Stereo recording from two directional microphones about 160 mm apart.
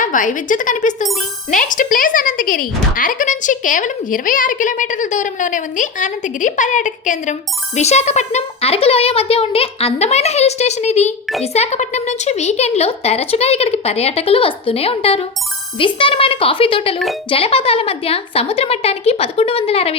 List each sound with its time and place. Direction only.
0.0 s a woman's voice: 55° left (ahead or behind); by 20.0 s 35° left (ahead or behind)